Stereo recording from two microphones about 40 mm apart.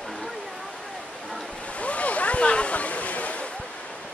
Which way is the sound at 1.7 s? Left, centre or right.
Left.